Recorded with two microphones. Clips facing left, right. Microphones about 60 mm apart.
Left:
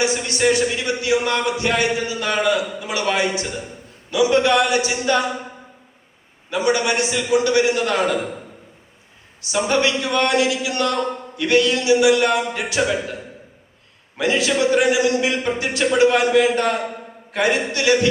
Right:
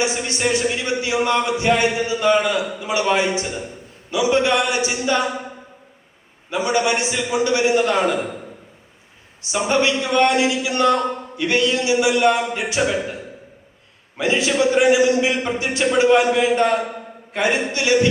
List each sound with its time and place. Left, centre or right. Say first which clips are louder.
0.0 s speech: left 2 dB; right
6.5 s speech: even; right
9.4 s speech: even; right
14.2 s speech: even; right